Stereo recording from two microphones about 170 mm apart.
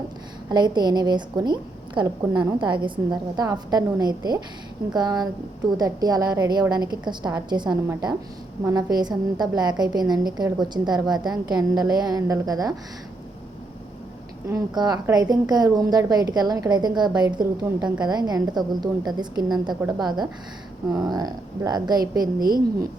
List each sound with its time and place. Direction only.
0.5 s a woman's voice: 25° right (ahead or behind)
14.4 s a woman's voice: 20° right (ahead or behind)
22.4 s a woman's voice: 60° right (ahead or behind)